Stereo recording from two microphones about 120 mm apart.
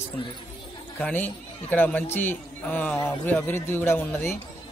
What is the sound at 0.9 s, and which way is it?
A man's voice, 15° left (ahead or behind).